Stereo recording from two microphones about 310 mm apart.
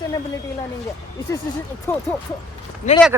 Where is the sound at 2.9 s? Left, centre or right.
Left.